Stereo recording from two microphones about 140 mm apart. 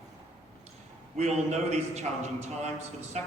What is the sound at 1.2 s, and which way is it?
A man's voice, 50° right (ahead or behind).